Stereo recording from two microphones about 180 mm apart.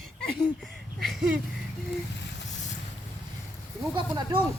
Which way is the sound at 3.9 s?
25° right (ahead or behind).